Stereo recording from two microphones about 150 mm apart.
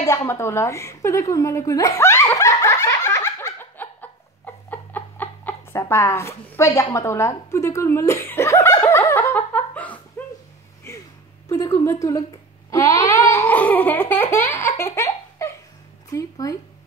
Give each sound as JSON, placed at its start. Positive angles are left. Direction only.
{"t": 0.0, "sound": "a woman's voice", "side_deg": 20}
{"t": 4.6, "sound": "a sound", "side_deg": 10}
{"t": 10.2, "sound": "dog", "side_deg": 15}
{"t": 11.4, "sound": "a woman's voice", "side_deg": 20}
{"t": 12.7, "sound": "babbling", "side_deg": 20}
{"t": 16.1, "sound": "speech", "side_deg": 20}